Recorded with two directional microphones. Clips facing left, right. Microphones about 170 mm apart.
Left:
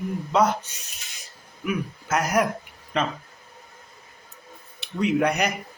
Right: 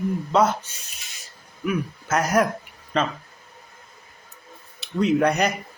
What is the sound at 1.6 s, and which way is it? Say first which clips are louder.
Speech: right 2 dB; 15° left (ahead or behind).